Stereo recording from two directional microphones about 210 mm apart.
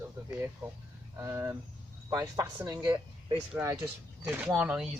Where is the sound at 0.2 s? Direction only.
15° right (ahead or behind).